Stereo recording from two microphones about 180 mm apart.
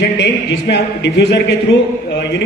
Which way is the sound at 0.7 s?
70° left (ahead or behind).